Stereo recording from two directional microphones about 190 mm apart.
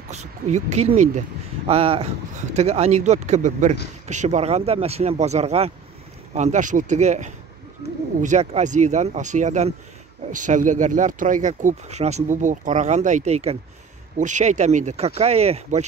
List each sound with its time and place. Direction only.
0.1 s speech: 35° right (ahead or behind)